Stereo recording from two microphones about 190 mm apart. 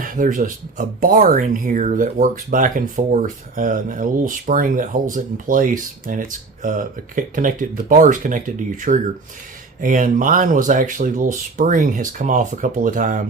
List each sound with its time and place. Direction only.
0.0 s speech: 45° right (ahead or behind)